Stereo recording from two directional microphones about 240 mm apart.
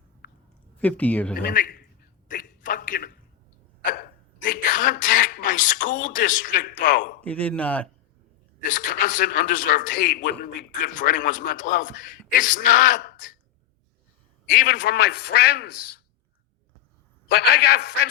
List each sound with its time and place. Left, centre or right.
0.8 s speech: centre
1.4 s a sound: left
3.8 s speech: left
7.2 s a man's voice: centre
8.6 s a man's voice: left
14.5 s a man's voice: left
17.4 s a man's voice: left